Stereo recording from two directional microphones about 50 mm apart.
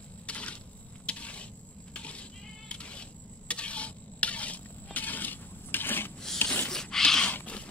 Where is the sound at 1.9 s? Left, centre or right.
Left.